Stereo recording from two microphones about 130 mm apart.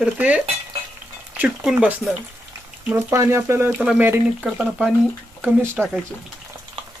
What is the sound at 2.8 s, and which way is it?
Speech, 20° right (ahead or behind).